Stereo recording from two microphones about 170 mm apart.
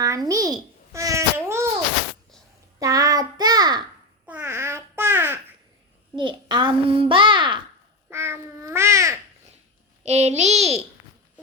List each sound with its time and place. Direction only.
0.0 s babbling: 20° right (ahead or behind)
2.7 s child singing: 20° right (ahead or behind)
4.3 s babbling: 10° right (ahead or behind)
6.1 s babbling: 25° right (ahead or behind)
8.1 s babbling: 15° right (ahead or behind)
10.0 s a child's voice: 40° right (ahead or behind)